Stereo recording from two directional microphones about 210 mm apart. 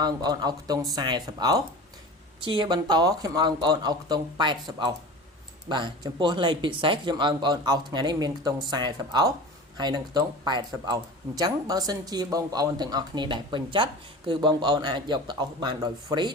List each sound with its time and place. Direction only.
0.0 s speech: 20° right (ahead or behind)